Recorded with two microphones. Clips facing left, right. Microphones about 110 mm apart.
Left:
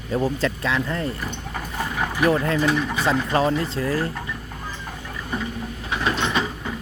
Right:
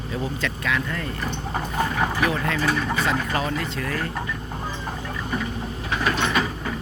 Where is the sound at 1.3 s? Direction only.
30° right (ahead or behind).